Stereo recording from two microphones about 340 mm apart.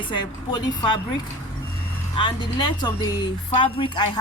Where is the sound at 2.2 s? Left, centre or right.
Centre.